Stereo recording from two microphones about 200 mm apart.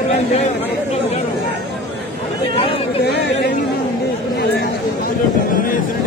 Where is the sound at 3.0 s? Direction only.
55° left (ahead or behind).